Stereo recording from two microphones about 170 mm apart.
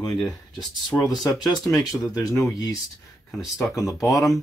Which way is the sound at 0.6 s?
25° left (ahead or behind).